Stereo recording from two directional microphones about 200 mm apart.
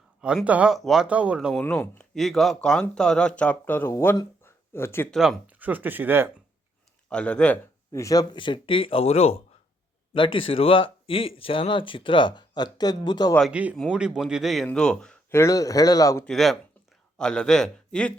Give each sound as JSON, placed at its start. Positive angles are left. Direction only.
{"t": 0.2, "sound": "speech", "side_deg": -5}
{"t": 1.5, "sound": "speech", "side_deg": 10}
{"t": 5.1, "sound": "speech", "side_deg": 0}
{"t": 7.1, "sound": "speech", "side_deg": 5}
{"t": 13.5, "sound": "speech", "side_deg": -5}
{"t": 16.2, "sound": "speech", "side_deg": 0}